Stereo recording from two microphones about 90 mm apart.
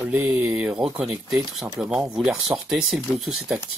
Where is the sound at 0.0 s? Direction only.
20° right (ahead or behind).